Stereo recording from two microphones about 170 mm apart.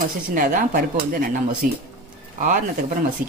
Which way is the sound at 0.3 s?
50° right (ahead or behind).